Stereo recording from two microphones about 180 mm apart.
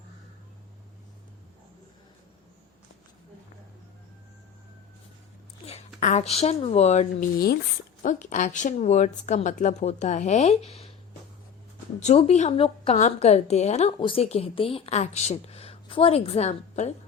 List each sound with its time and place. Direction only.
5.6 s speech: 40° left (ahead or behind)
7.3 s speech: 60° left (ahead or behind)
8.0 s a woman's voice: 45° left (ahead or behind)
11.9 s a woman's voice: 40° left (ahead or behind)